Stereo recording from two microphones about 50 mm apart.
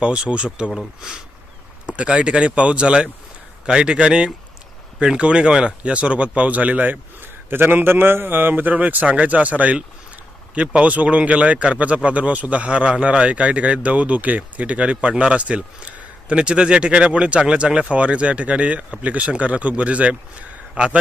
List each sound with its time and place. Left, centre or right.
0.0 s a man's voice: right
2.0 s a man's voice: right
7.4 s a man's voice: right